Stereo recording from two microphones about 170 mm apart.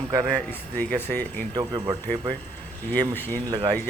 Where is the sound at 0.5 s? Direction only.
10° left (ahead or behind).